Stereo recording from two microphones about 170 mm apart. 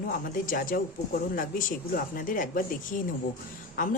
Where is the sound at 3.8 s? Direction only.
50° left (ahead or behind).